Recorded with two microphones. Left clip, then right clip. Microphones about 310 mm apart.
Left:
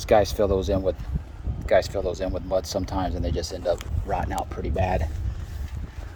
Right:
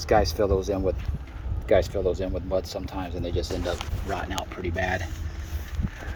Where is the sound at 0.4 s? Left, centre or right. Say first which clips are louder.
Left 1 dB; left.